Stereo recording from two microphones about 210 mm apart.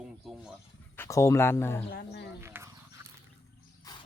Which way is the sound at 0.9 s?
10° left (ahead or behind).